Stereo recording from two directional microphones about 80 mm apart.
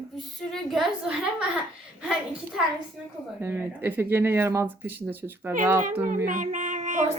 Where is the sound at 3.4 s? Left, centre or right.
Right.